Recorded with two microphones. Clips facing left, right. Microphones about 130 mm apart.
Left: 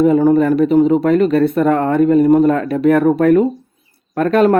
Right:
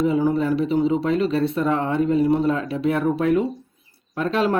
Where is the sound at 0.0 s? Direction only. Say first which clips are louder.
Left 8 dB; 50° left (ahead or behind).